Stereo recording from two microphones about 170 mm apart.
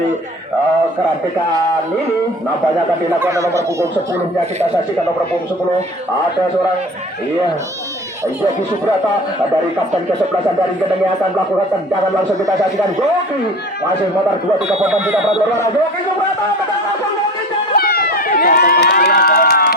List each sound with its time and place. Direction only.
3.2 s speech: 15° right (ahead or behind)
14.8 s speech: 10° right (ahead or behind)
17.7 s run: 65° left (ahead or behind)